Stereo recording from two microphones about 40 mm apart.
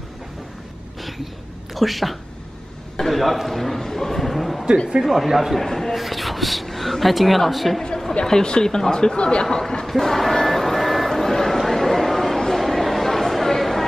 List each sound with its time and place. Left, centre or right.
1.0 s a sound: centre
1.8 s a man's voice: centre
5.6 s speech: centre
8.3 s speech: centre
9.8 s music: centre